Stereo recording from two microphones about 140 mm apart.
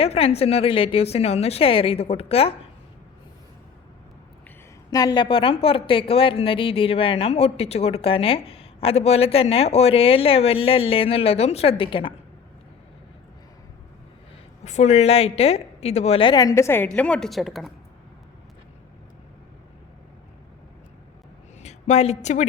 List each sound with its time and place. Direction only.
0.0 s speech: 45° left (ahead or behind)
4.9 s speech: 30° left (ahead or behind)
14.6 s speech: 55° left (ahead or behind)
16.3 s a woman's voice: 25° left (ahead or behind)
16.9 s speech: 5° left (ahead or behind)
21.6 s a woman's voice: 55° left (ahead or behind)